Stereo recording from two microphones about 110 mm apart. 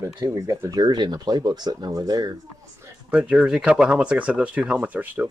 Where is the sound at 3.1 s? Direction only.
10° right (ahead or behind).